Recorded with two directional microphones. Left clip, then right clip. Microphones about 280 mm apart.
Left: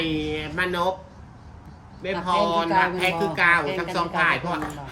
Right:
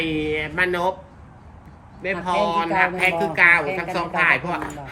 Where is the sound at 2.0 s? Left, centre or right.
Centre.